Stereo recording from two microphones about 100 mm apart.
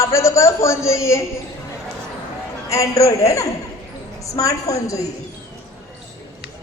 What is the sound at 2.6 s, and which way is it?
A woman's voice, 30° left (ahead or behind).